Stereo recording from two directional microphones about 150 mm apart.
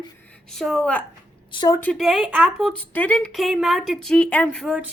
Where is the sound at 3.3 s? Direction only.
Centre (ahead or behind).